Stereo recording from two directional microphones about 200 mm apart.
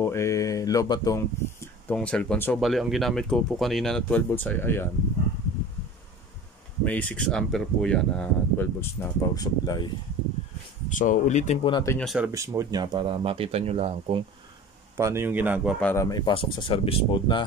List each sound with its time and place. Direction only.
0.0 s a sound: 15° left (ahead or behind)
2.0 s speech: 5° left (ahead or behind)
6.8 s speech: 5° left (ahead or behind)
10.9 s speech: 40° left (ahead or behind)
11.6 s speech: 20° left (ahead or behind)
12.0 s speech: centre (ahead or behind)
12.3 s speech: 15° right (ahead or behind)
15.0 s speech: 15° right (ahead or behind)
15.8 s speech: 15° left (ahead or behind)